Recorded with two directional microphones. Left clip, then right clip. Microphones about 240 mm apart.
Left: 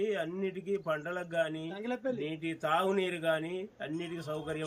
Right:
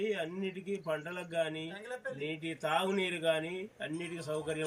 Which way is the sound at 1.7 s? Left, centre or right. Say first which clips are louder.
Left 5 dB; left.